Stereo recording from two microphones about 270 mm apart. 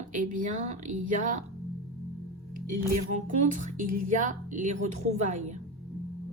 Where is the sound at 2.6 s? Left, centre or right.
Right.